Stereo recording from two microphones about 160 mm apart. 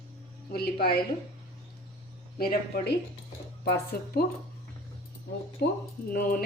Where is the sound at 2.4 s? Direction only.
65° left (ahead or behind).